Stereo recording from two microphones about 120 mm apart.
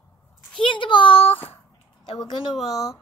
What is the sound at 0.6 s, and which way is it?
A child's voice, 45° left (ahead or behind).